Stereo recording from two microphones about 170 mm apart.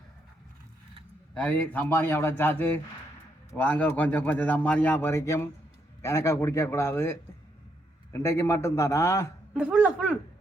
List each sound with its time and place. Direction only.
1.3 s speech: 10° left (ahead or behind)
9.6 s speech: 5° right (ahead or behind)